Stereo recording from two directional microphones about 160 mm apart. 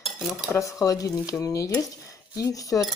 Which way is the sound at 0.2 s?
Centre (ahead or behind).